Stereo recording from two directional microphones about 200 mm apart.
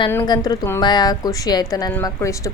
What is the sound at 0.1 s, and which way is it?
A woman's voice, 15° left (ahead or behind).